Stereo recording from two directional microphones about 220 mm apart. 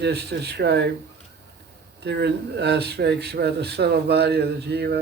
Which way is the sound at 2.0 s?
50° right (ahead or behind).